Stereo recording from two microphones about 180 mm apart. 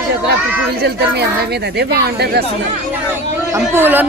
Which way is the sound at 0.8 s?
65° right (ahead or behind).